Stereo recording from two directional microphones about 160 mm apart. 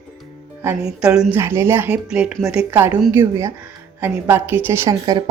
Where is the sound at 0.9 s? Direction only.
5° right (ahead or behind).